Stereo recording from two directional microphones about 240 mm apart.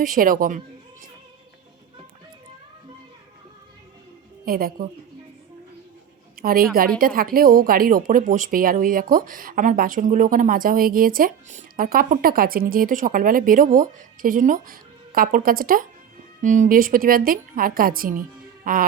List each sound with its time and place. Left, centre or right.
0.0 s speech: right
4.4 s speech: right
6.3 s a woman's voice: right
18.6 s music: right